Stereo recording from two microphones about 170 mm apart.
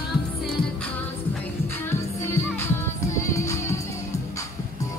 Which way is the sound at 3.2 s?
15° left (ahead or behind).